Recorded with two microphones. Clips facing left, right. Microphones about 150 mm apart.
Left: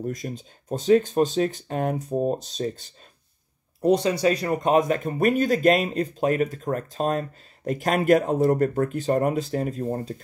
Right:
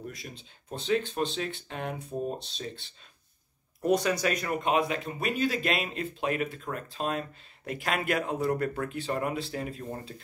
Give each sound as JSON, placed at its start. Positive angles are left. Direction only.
{"t": 0.0, "sound": "speech", "side_deg": 45}
{"t": 3.8, "sound": "speech", "side_deg": 30}